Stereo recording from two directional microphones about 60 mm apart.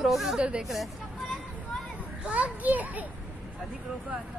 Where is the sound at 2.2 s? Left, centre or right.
Right.